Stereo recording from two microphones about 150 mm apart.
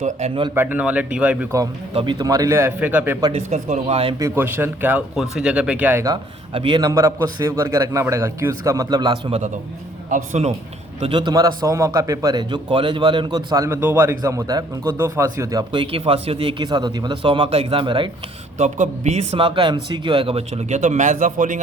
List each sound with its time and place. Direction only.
0.0 s speech: 45° right (ahead or behind)
0.5 s speech: 10° right (ahead or behind)
1.9 s speech: 35° right (ahead or behind)
2.2 s speech: 20° right (ahead or behind)
3.3 s a man's voice: 45° right (ahead or behind)
4.2 s speech: 15° right (ahead or behind)
6.5 s a man's voice: 35° right (ahead or behind)
10.1 s a man's voice: 50° right (ahead or behind)
11.0 s a man's voice: 35° right (ahead or behind)
18.5 s a man's voice: 50° right (ahead or behind)